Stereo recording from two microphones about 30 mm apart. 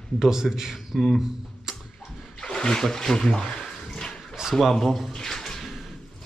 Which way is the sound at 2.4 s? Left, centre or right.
Left.